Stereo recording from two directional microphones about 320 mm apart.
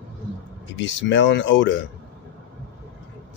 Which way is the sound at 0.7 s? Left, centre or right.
Left.